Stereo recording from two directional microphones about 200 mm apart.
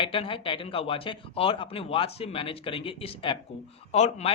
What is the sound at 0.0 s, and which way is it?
Speech, 25° left (ahead or behind).